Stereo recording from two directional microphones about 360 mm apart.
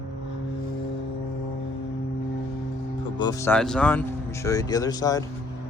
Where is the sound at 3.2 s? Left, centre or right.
Centre.